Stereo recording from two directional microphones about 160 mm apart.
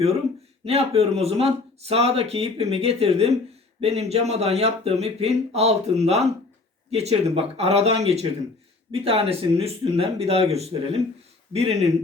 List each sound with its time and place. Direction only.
0.6 s speech: 40° right (ahead or behind)